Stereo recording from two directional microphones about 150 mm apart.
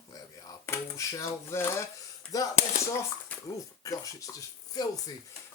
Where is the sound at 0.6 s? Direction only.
20° left (ahead or behind).